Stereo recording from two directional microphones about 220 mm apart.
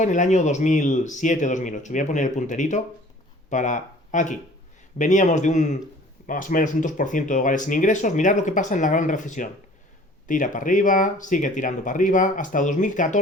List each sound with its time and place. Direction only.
0.0 s speech: 35° left (ahead or behind)